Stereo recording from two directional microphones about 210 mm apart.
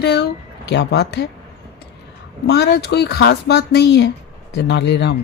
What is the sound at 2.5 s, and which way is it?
Speech, 50° left (ahead or behind).